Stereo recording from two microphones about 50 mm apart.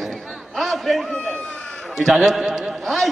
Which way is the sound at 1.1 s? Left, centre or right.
Centre.